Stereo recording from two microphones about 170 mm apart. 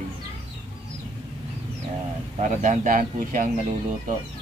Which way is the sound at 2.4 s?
45° right (ahead or behind).